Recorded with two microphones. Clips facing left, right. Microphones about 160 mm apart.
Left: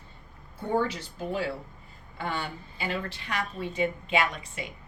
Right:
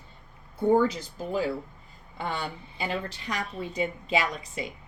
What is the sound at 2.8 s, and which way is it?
A woman's voice, 40° right (ahead or behind).